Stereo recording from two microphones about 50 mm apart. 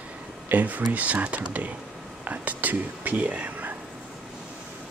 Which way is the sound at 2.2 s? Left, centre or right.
Right.